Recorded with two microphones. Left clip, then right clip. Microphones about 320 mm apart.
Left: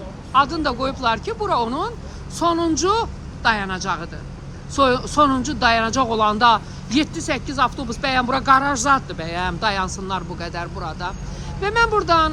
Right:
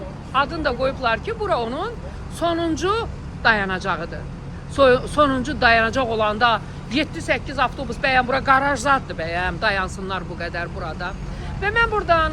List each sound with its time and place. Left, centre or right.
0.3 s speech: centre